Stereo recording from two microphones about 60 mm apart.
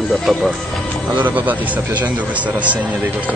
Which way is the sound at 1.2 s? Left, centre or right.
Right.